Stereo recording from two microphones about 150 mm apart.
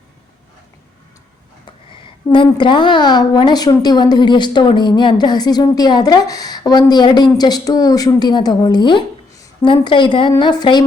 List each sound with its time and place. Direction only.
1.9 s a woman's voice: 35° left (ahead or behind)